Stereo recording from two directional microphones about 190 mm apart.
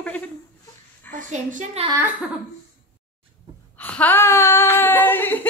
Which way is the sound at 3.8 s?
10° left (ahead or behind).